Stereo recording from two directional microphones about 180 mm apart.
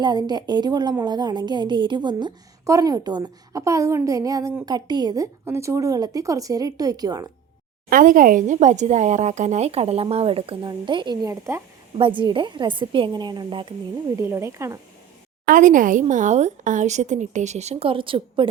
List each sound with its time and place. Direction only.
0.0 s a woman's voice: 25° right (ahead or behind)
7.9 s speech: 50° right (ahead or behind); by 11.6 s 15° right (ahead or behind)
11.9 s a woman's voice: 30° right (ahead or behind)
14.2 s speech: 15° right (ahead or behind)
15.4 s speech: 45° right (ahead or behind); by 18.4 s 30° right (ahead or behind)